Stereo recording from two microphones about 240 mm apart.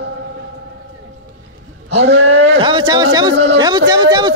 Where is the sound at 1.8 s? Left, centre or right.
Right.